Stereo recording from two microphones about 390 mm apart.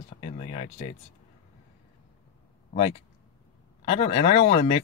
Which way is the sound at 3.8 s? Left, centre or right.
Centre.